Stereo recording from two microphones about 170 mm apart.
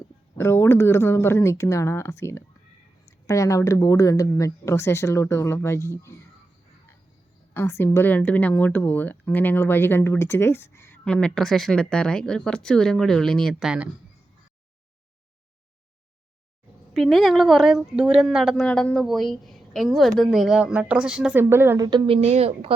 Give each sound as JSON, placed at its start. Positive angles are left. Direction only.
{"t": 0.3, "sound": "a woman's voice", "side_deg": 15}
{"t": 7.5, "sound": "a woman's voice", "side_deg": 15}
{"t": 16.9, "sound": "speech", "side_deg": 0}
{"t": 21.8, "sound": "speech", "side_deg": -30}